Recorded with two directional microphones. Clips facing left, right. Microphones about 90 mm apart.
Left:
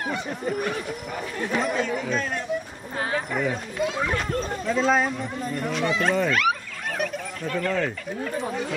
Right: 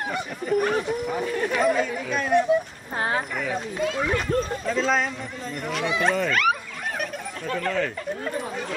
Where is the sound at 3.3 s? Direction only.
10° left (ahead or behind).